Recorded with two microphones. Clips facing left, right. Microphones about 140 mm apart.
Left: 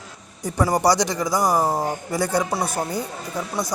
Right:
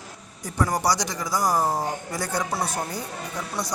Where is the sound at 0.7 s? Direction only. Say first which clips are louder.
Left 8 dB; 25° left (ahead or behind); by 2.4 s 10° left (ahead or behind).